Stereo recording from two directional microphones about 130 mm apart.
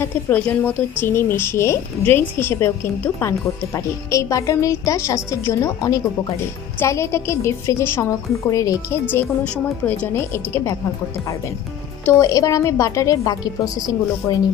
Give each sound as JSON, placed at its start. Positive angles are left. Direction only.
{"t": 0.0, "sound": "a woman's voice", "side_deg": 15}
{"t": 9.0, "sound": "a woman's voice", "side_deg": 10}
{"t": 12.0, "sound": "a woman's voice", "side_deg": 20}